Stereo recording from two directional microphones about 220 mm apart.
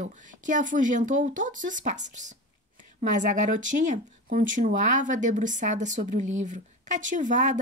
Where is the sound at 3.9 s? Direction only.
40° right (ahead or behind).